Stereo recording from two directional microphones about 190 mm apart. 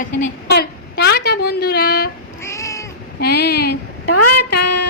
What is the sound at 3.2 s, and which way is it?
Speech, 55° left (ahead or behind).